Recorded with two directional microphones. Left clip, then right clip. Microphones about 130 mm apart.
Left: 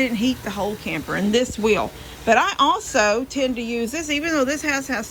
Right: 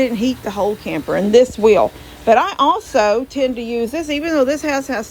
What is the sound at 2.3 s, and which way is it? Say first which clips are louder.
A woman's voice: right 4 dB; 30° right (ahead or behind).